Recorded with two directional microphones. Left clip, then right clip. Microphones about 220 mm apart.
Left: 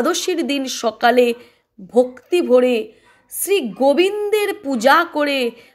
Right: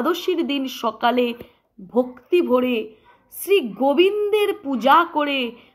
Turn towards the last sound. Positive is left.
turn(degrees=25)  # may be behind; listen again after turning